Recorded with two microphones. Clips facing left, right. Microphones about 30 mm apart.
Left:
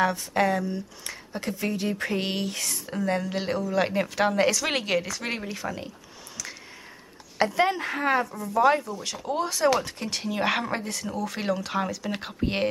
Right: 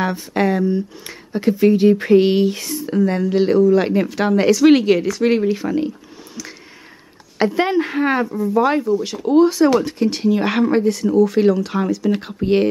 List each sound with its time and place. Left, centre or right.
0.0 s speech: right